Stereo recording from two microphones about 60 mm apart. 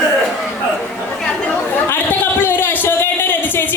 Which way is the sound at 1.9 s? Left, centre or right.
Left.